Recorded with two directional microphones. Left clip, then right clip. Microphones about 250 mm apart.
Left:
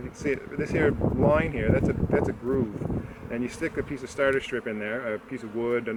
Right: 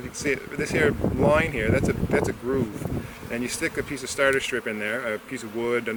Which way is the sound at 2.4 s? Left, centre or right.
Centre.